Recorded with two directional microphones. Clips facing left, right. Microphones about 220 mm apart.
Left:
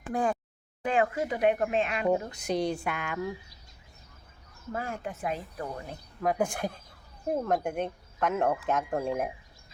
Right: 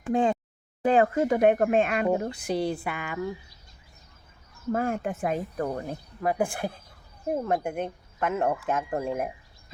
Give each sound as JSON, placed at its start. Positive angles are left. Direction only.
{"t": 0.1, "sound": "a sound", "side_deg": -25}
{"t": 0.8, "sound": "speech", "side_deg": -35}
{"t": 2.0, "sound": "speech", "side_deg": -5}
{"t": 4.7, "sound": "speech", "side_deg": -55}
{"t": 6.2, "sound": "speech", "side_deg": -5}